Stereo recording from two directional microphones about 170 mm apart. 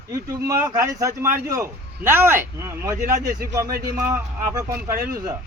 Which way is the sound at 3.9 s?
20° right (ahead or behind).